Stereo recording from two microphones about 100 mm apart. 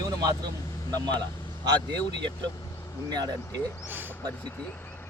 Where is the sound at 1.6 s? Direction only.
50° right (ahead or behind).